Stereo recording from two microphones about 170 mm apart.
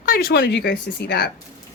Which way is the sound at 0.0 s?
60° left (ahead or behind).